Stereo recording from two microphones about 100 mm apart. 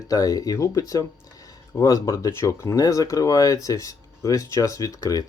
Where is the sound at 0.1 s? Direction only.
35° left (ahead or behind).